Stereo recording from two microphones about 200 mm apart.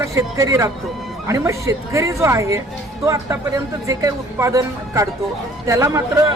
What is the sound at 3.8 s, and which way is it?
Speech, 15° right (ahead or behind).